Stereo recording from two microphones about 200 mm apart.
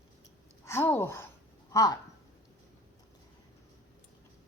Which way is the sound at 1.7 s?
15° left (ahead or behind).